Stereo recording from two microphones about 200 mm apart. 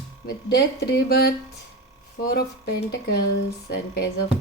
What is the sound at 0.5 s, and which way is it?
Speech, 55° left (ahead or behind).